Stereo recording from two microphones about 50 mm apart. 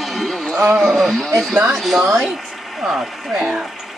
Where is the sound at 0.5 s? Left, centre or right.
Right.